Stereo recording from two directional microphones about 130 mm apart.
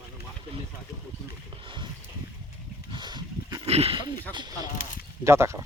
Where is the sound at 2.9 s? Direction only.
35° right (ahead or behind).